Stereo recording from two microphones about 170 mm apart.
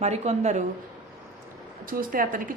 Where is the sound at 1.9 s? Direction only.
55° right (ahead or behind).